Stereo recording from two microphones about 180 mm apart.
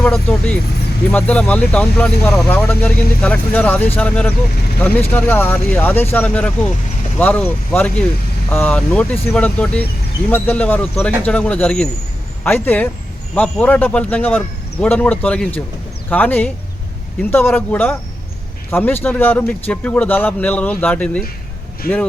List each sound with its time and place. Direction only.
0.0 s speech: 10° left (ahead or behind)
21.8 s speech: 55° left (ahead or behind)